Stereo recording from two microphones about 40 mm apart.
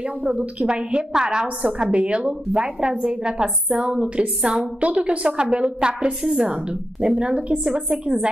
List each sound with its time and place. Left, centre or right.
0.0 s a woman's voice: right
6.2 s a woman's voice: centre
6.5 s a woman's voice: right